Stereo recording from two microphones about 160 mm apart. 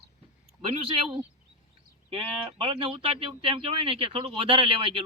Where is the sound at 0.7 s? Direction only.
35° right (ahead or behind).